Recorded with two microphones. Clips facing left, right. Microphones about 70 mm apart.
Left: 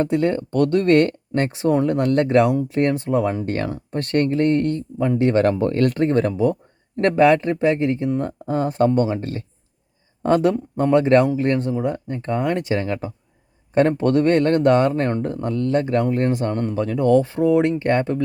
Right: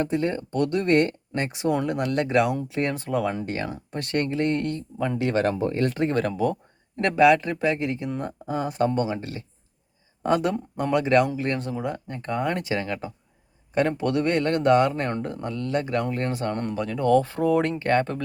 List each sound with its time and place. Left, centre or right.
0.1 s speech: left
1.5 s speech: left
2.9 s speech: left
3.4 s speech: left
5.1 s speech: left
5.5 s speech: left
6.0 s speech: left
7.0 s speech: left
11.7 s speech: left